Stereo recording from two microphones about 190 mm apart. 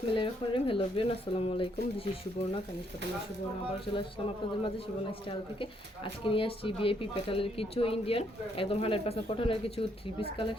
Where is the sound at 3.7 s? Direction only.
30° left (ahead or behind).